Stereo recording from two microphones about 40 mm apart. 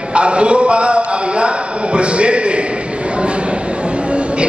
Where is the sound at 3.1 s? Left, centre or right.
Right.